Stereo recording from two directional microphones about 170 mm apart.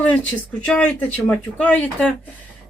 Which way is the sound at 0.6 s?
5° left (ahead or behind).